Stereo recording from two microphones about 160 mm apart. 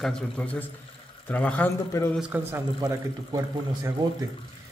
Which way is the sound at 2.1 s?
10° right (ahead or behind).